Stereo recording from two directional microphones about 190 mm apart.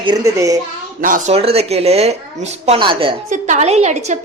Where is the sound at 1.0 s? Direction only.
45° right (ahead or behind).